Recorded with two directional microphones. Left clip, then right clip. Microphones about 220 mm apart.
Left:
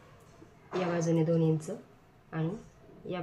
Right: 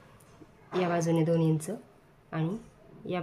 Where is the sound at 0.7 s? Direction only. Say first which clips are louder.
Right 2 dB; 45° right (ahead or behind).